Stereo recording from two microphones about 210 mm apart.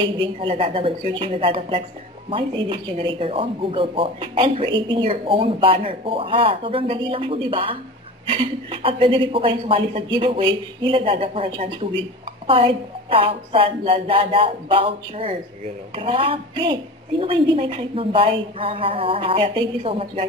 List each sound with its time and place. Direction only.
0.0 s speech: 25° right (ahead or behind)